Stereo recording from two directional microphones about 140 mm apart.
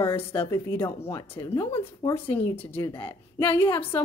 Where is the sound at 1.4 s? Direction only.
30° left (ahead or behind).